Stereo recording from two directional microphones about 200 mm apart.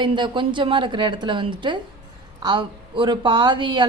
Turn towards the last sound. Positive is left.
turn(degrees=-20)  # may be behind; listen again after turning